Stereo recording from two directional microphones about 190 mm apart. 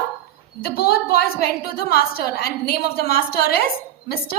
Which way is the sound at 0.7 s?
55° left (ahead or behind).